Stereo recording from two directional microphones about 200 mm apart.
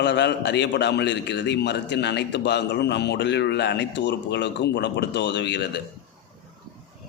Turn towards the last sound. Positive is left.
turn(degrees=55)  # may be behind; listen again after turning